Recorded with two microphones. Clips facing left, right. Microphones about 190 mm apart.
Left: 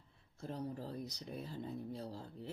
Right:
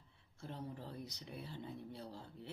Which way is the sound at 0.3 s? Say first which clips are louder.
Left 5 dB; 40° left (ahead or behind).